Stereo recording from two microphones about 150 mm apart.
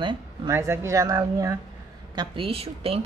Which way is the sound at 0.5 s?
20° right (ahead or behind).